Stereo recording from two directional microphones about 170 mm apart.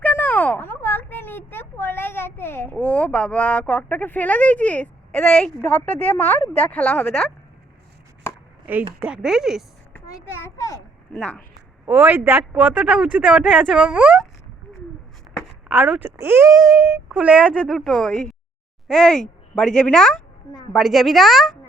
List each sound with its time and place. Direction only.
0.0 s speech: 10° left (ahead or behind)
9.0 s speech: 5° right (ahead or behind)
10.4 s a child's voice: 15° left (ahead or behind)
11.9 s speech: 10° right (ahead or behind)
15.7 s speech: 10° right (ahead or behind)